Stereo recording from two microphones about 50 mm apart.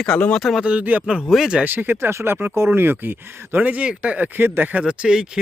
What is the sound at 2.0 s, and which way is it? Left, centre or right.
Speech, right.